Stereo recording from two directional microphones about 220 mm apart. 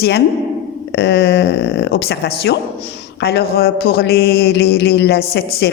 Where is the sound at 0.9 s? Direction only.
50° left (ahead or behind).